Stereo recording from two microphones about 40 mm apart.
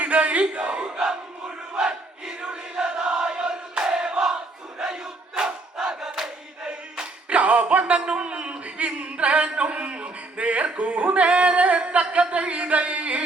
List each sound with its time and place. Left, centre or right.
0.0 s battle cry: right
2.2 s choir: right
4.8 s crowd: centre
6.7 s a sound: right
7.3 s a sound: right
12.3 s music: right